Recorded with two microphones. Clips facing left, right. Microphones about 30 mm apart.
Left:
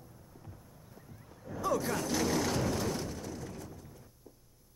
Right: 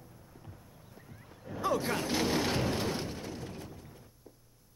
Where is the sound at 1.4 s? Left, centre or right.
Right.